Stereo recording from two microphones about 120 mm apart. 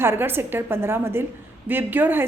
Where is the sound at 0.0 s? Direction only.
20° right (ahead or behind).